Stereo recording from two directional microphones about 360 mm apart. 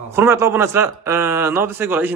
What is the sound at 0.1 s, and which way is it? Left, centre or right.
A man's voice, centre.